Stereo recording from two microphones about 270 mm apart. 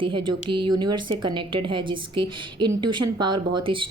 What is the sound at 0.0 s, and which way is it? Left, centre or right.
A woman's voice, centre.